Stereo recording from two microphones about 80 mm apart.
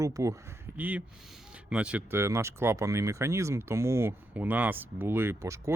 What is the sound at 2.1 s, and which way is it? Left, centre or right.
Speech, right.